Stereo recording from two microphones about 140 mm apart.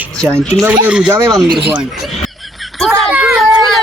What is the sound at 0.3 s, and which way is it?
Speech, 5° left (ahead or behind).